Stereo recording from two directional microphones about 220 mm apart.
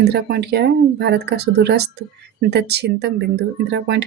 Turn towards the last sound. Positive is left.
turn(degrees=-50)  # may be behind; listen again after turning